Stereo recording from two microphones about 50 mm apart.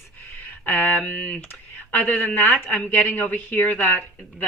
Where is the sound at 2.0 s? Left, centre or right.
Left.